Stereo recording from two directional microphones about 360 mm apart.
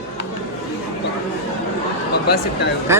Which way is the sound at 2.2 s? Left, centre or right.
Left.